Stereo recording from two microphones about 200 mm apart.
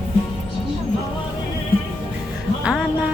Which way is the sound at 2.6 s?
5° right (ahead or behind).